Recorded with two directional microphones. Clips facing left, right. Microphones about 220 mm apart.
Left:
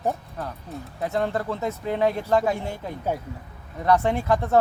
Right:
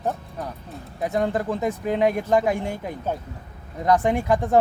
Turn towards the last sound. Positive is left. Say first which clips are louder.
# right 1 dB
turn(degrees=-15)  # may be behind; listen again after turning